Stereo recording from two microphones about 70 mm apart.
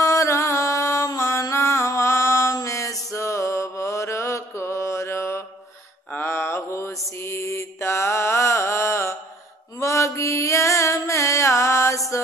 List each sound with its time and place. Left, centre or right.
0.0 s music: left
1.5 s a sound: left
2.5 s mantra: left
9.8 s music: left